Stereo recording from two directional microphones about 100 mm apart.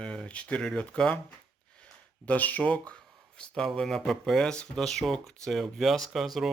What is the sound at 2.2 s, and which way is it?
Speech, 15° left (ahead or behind).